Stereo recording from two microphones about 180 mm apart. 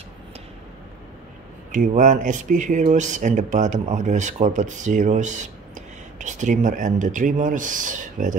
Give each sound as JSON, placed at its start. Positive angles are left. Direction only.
{"t": 1.7, "sound": "speech", "side_deg": -45}